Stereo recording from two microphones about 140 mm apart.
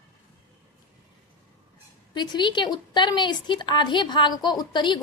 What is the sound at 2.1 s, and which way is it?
A woman's voice, 30° left (ahead or behind).